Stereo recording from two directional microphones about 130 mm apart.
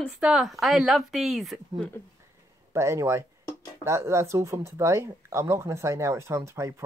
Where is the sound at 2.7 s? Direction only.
20° right (ahead or behind).